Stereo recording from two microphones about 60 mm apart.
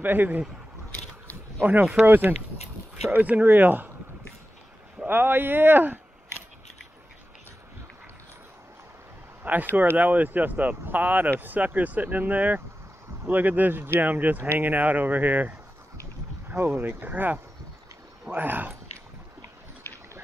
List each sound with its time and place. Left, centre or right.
0.0 s speech: right
1.6 s speech: right
2.0 s speech: right
3.1 s speech: right
5.0 s speech: right
9.4 s speech: right